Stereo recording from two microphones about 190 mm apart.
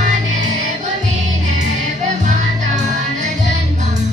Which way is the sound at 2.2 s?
40° right (ahead or behind).